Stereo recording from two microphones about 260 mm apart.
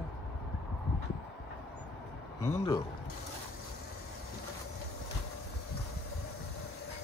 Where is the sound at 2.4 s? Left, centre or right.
Centre.